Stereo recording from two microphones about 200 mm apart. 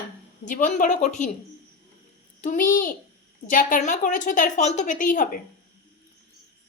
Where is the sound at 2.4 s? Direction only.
40° left (ahead or behind).